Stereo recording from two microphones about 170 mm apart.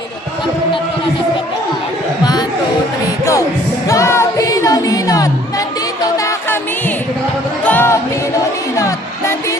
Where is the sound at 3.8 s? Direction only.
15° left (ahead or behind).